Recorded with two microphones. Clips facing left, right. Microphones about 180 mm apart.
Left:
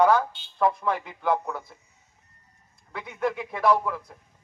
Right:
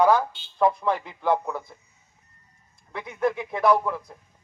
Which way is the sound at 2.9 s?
Centre (ahead or behind).